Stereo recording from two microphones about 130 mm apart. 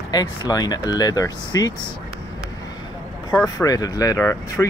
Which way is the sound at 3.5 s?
30° left (ahead or behind).